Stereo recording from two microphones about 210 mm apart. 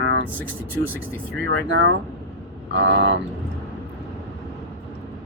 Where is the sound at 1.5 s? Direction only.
65° right (ahead or behind).